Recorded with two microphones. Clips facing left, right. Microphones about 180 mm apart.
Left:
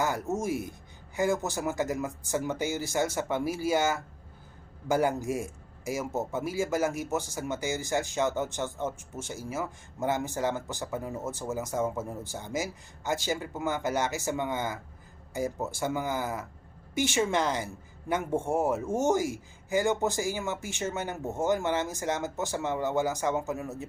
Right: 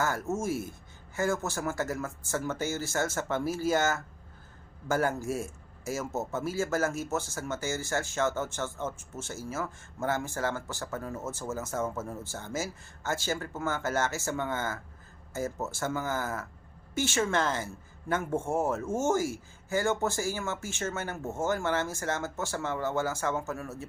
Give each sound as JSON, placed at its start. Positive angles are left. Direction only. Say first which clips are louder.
{"t": 0.0, "sound": "a man's voice", "louder": "left 1 dB", "side_deg": 15}